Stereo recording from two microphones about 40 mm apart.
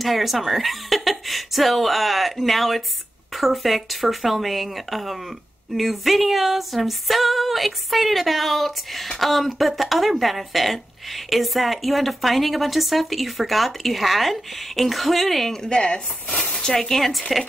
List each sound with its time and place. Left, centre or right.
0.0 s speech: centre
15.6 s speech: left; by 17.2 s centre